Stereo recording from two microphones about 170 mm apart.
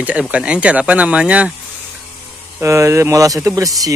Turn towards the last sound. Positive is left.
turn(degrees=-20)  # may be behind; listen again after turning